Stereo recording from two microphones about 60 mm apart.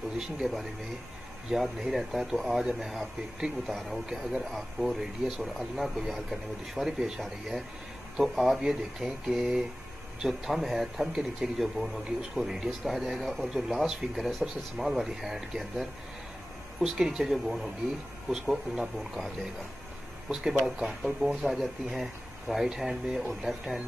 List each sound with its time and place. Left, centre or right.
0.2 s speech: centre